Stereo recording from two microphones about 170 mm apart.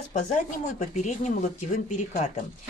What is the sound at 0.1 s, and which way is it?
Speech, 45° left (ahead or behind).